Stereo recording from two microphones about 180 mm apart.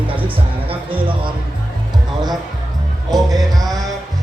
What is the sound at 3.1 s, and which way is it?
Music, 20° right (ahead or behind).